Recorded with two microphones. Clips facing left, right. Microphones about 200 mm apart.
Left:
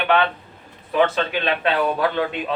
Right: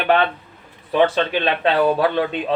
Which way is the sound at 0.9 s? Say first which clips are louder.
Right 2 dB; 30° right (ahead or behind).